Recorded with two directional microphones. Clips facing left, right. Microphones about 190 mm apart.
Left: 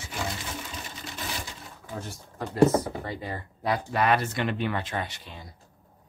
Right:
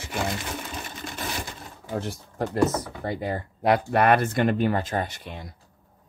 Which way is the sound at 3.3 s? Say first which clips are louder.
Right 7 dB; 55° right (ahead or behind).